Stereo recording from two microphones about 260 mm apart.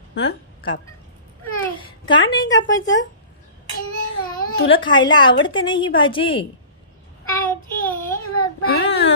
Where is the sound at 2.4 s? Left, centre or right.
Left.